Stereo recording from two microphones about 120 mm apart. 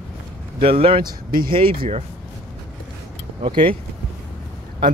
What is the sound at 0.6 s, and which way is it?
Speech, 50° right (ahead or behind).